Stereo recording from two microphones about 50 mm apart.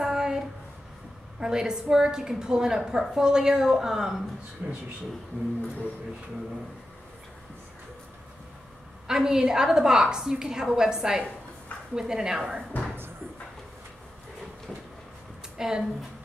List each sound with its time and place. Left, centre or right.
0.0 s a sound: centre
1.4 s a woman's voice: centre
4.6 s a man's voice: right
9.0 s a woman's voice: centre
12.7 s music: left
15.5 s a woman's voice: centre